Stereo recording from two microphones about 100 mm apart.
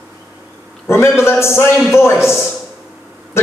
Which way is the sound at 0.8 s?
25° left (ahead or behind).